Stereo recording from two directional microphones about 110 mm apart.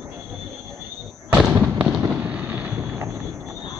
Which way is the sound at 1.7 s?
15° right (ahead or behind).